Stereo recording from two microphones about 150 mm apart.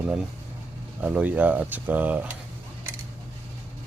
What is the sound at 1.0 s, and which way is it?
Speech, 10° right (ahead or behind).